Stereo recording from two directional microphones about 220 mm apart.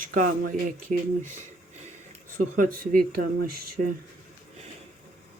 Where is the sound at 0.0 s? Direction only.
40° right (ahead or behind).